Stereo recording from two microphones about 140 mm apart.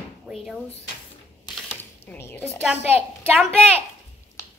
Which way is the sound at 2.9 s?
15° right (ahead or behind).